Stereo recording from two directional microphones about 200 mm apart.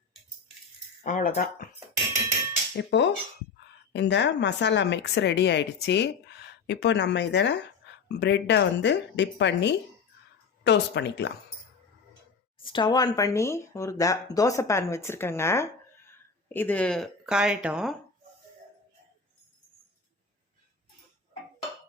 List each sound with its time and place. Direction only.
1.0 s speech: 40° left (ahead or behind)
2.7 s speech: 60° left (ahead or behind)
12.6 s speech: 25° left (ahead or behind); by 17.9 s 5° right (ahead or behind)